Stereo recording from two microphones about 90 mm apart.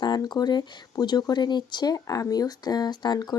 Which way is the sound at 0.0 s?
50° left (ahead or behind).